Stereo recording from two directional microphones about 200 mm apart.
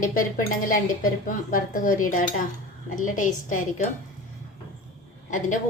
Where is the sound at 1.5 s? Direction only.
40° left (ahead or behind).